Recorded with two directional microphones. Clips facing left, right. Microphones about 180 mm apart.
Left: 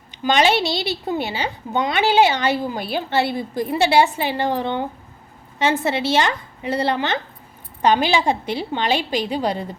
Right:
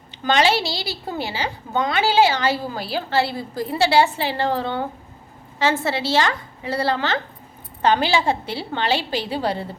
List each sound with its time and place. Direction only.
0.1 s a woman's voice: 20° left (ahead or behind)